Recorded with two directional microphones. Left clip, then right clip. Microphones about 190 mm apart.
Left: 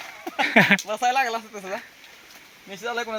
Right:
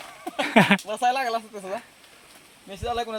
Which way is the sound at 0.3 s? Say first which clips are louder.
Left 2 dB; 15° right (ahead or behind).